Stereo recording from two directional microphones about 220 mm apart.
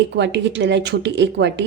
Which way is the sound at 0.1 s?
55° right (ahead or behind).